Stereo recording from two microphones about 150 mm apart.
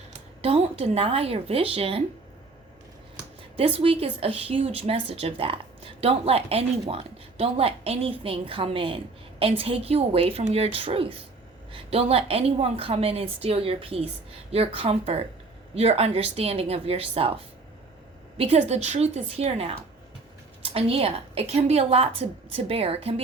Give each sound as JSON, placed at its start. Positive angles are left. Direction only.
{"t": 0.4, "sound": "a woman's voice", "side_deg": -40}
{"t": 3.6, "sound": "a woman's voice", "side_deg": -40}